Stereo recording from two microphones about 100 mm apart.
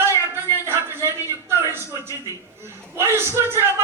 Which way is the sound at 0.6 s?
25° right (ahead or behind).